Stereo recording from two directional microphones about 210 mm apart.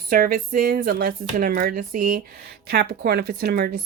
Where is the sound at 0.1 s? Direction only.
45° right (ahead or behind).